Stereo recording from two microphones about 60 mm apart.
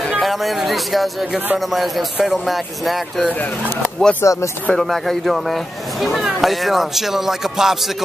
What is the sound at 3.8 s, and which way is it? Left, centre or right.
Speech, centre.